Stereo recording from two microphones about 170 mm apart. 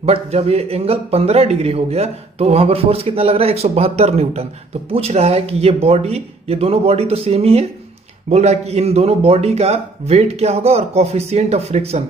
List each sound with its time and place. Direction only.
0.0 s a man's voice: 35° right (ahead or behind)